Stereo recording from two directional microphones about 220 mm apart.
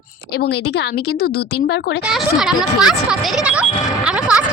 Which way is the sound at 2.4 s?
Centre (ahead or behind).